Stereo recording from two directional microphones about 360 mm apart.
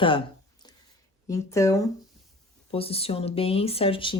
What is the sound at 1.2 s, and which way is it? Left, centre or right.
Speech, centre.